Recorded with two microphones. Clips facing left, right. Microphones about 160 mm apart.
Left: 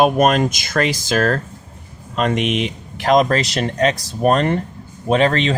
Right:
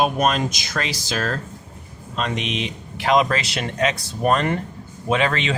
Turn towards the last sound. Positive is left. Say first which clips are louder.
# left 5 dB
turn(degrees=35)  # may be behind; listen again after turning